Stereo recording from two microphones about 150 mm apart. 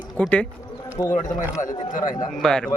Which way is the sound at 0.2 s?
10° left (ahead or behind).